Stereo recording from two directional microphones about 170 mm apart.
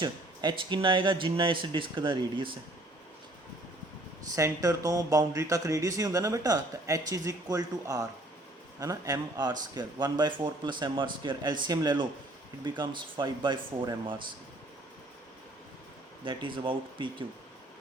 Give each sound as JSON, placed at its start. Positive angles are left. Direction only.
{"t": 0.0, "sound": "speech", "side_deg": -25}
{"t": 4.2, "sound": "speech", "side_deg": -20}
{"t": 16.2, "sound": "speech", "side_deg": -30}